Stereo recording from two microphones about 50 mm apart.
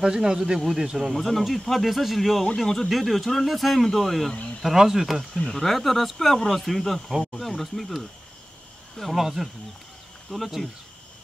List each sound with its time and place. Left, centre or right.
0.0 s speech: centre
1.1 s speech: centre
5.3 s speech: centre